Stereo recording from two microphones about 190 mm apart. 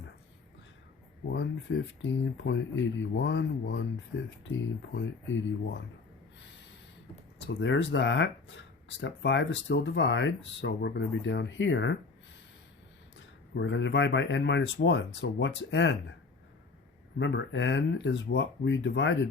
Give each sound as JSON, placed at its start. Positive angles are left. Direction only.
{"t": 1.3, "sound": "speech", "side_deg": 65}
{"t": 7.4, "sound": "speech", "side_deg": 70}
{"t": 13.1, "sound": "speech", "side_deg": 75}
{"t": 17.2, "sound": "speech", "side_deg": 65}